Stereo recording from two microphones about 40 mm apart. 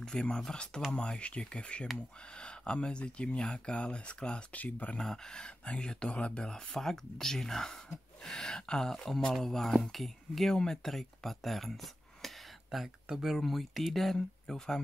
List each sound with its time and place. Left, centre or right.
0.0 s speech: left
4.5 s speech: left
5.0 s speech: centre
6.4 s speech: centre
12.7 s speech: centre
13.4 s speech: centre